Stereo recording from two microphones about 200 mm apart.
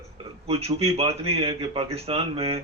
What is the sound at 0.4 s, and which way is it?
A man's voice, 30° right (ahead or behind).